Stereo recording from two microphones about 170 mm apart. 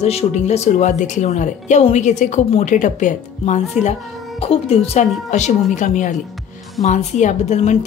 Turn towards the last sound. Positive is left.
turn(degrees=40)  # may be behind; listen again after turning